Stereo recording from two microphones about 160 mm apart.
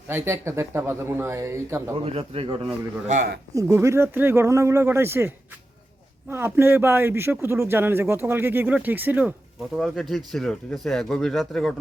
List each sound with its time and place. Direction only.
0.1 s a man's voice: 15° right (ahead or behind)
2.0 s a man's voice: 35° right (ahead or behind)
3.5 s a man's voice: 20° right (ahead or behind)
9.7 s speech: centre (ahead or behind)